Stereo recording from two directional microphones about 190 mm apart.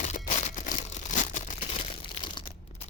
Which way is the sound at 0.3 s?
40° left (ahead or behind).